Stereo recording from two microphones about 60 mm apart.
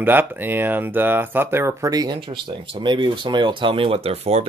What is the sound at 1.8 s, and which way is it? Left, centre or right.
Speech, right.